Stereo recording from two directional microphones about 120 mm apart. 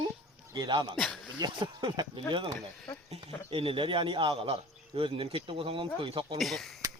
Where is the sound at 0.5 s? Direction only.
40° right (ahead or behind).